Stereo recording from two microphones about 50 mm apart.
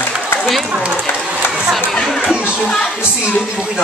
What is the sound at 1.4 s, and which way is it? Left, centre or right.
Chatter, left.